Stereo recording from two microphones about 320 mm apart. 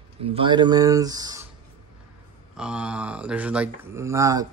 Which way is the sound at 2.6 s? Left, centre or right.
Centre.